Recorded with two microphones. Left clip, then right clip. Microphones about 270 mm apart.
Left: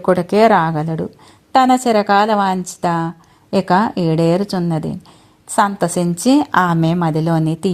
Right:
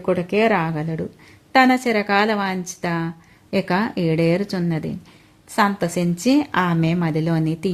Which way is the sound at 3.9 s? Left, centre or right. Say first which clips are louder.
Left 3 dB; left.